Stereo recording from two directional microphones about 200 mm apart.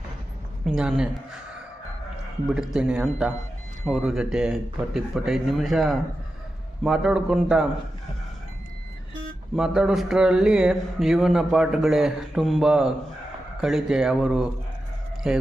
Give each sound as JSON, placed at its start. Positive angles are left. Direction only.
{"t": 0.6, "sound": "speech", "side_deg": -5}
{"t": 2.5, "sound": "speech", "side_deg": -5}
{"t": 9.6, "sound": "speech", "side_deg": 0}